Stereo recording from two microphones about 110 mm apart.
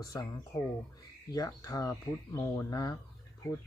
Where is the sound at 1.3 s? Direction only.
35° left (ahead or behind).